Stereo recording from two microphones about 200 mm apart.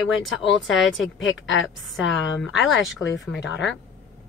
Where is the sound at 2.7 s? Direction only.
65° left (ahead or behind).